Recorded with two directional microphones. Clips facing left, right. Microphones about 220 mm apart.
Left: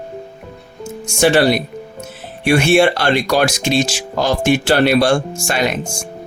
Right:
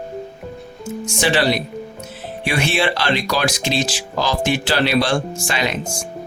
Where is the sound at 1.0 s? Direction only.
45° left (ahead or behind).